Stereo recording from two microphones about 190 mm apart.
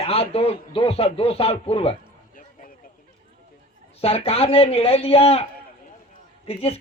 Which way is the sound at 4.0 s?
30° left (ahead or behind).